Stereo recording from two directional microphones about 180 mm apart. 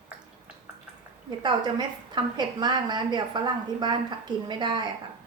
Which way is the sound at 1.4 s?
25° right (ahead or behind).